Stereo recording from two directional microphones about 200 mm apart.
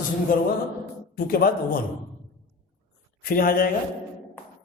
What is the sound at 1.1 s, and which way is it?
Speech, 45° left (ahead or behind).